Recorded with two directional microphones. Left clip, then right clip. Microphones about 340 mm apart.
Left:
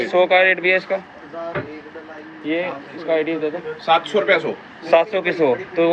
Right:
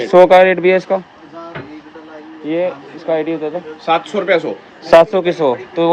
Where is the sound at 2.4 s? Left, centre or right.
Centre.